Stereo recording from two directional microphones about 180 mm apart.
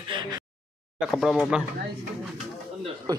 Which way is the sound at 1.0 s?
Centre (ahead or behind).